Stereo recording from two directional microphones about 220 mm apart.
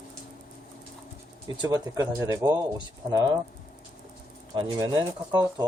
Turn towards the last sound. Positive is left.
turn(degrees=-20)  # may be behind; listen again after turning